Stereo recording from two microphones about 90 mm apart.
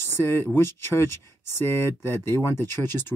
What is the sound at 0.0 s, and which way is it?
Speech, 25° left (ahead or behind).